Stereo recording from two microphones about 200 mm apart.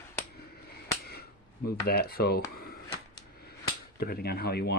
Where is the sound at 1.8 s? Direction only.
50° left (ahead or behind).